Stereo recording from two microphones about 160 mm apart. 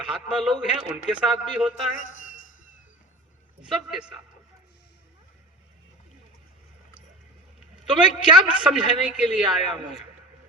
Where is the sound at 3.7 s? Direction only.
5° right (ahead or behind).